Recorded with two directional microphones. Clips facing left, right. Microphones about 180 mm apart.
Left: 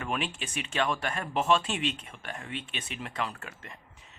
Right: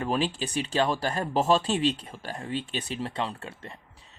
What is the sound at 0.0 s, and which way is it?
Speech, 35° right (ahead or behind).